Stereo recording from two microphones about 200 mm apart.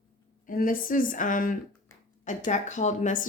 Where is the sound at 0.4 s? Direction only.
45° left (ahead or behind).